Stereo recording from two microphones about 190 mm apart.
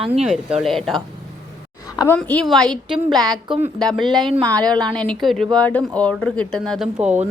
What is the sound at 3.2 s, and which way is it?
Speech, 20° right (ahead or behind).